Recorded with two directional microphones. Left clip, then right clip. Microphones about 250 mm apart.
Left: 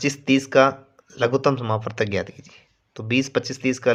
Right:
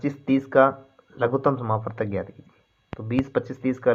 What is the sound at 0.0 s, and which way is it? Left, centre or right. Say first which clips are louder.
Speech: left 4 dB; left.